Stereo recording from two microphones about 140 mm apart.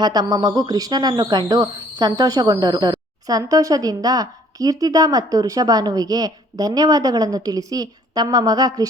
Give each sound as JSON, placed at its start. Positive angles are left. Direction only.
{"t": 0.0, "sound": "a woman's voice", "side_deg": -30}